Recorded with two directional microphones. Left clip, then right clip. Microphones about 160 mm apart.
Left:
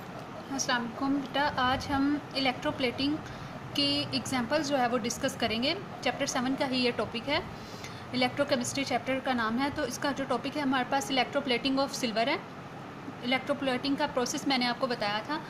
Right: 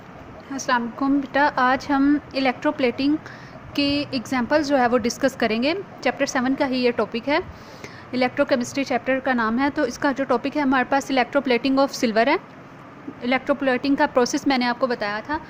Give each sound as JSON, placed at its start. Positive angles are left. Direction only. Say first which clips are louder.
{"t": 0.7, "sound": "a woman's voice", "louder": "right 10 dB", "side_deg": -55}